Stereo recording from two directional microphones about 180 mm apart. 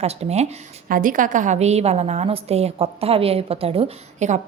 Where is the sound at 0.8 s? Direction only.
50° right (ahead or behind).